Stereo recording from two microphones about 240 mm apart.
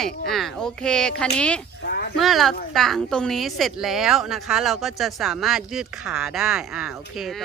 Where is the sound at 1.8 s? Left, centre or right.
Left.